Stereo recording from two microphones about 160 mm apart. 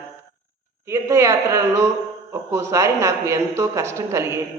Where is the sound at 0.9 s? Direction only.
15° right (ahead or behind).